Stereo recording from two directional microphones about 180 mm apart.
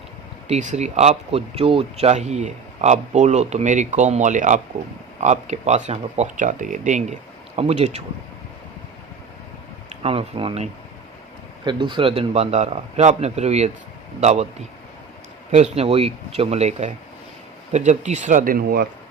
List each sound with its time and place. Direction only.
0.4 s speech: 40° right (ahead or behind)
9.9 s speech: 35° right (ahead or behind)
15.5 s speech: 35° right (ahead or behind); by 18.9 s 55° right (ahead or behind)